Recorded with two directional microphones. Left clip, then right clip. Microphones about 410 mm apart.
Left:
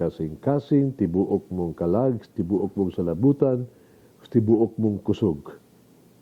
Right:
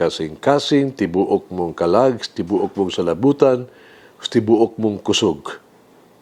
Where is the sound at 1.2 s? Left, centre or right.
Centre.